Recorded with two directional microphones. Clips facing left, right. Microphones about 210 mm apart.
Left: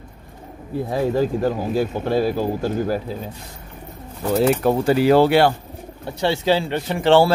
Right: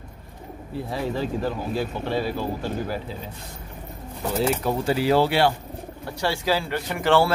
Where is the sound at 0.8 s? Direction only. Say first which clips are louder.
Left 7 dB; 45° left (ahead or behind).